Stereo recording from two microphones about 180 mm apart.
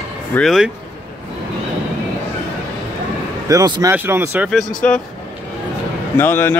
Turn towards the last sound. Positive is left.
turn(degrees=10)  # may be behind; listen again after turning